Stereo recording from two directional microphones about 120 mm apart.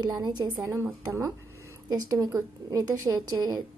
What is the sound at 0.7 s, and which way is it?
A woman's voice, 20° right (ahead or behind).